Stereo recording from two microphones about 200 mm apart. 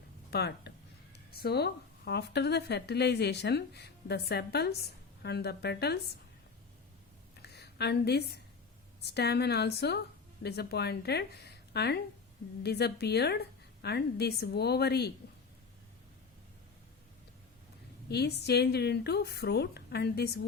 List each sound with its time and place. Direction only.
0.3 s speech: 55° left (ahead or behind)
7.4 s a sound: 55° left (ahead or behind)
9.0 s a woman's voice: 55° left (ahead or behind)
18.1 s speech: 55° left (ahead or behind)